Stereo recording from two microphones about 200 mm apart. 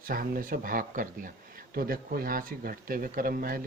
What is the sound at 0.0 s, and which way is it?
Speech, 45° right (ahead or behind).